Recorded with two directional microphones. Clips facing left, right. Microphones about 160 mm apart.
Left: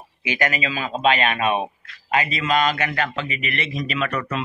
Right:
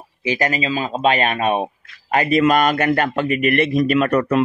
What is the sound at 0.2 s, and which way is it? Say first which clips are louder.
Speech: right 4 dB; 35° right (ahead or behind).